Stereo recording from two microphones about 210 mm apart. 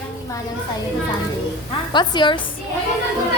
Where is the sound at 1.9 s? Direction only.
20° left (ahead or behind).